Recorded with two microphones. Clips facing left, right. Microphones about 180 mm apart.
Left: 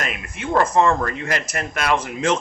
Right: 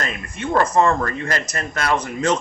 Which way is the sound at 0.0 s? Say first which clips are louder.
Right 1 dB; 10° left (ahead or behind).